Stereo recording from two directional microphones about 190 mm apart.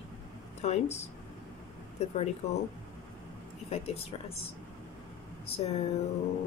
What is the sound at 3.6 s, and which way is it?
Speech, 35° left (ahead or behind).